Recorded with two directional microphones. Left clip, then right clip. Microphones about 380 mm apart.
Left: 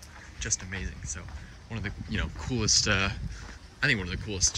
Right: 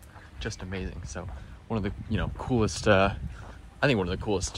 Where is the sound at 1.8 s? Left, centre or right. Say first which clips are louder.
Right 1 dB; centre.